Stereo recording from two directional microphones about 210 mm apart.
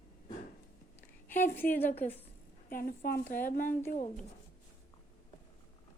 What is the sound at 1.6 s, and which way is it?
Speech, 45° left (ahead or behind).